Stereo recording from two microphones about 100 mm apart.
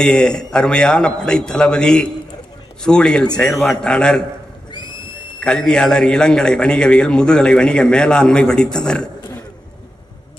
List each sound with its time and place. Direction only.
0.0 s a man's voice: 5° left (ahead or behind)
4.6 s a sound: 50° left (ahead or behind)
5.4 s a man's voice: 10° left (ahead or behind)